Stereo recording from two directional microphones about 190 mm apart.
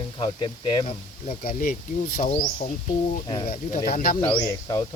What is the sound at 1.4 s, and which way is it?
Speech, 50° left (ahead or behind).